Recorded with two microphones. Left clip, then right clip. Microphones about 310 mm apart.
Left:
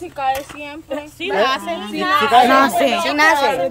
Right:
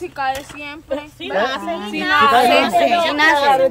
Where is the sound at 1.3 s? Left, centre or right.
Left.